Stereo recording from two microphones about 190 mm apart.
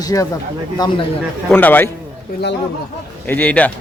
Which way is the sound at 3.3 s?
5° left (ahead or behind).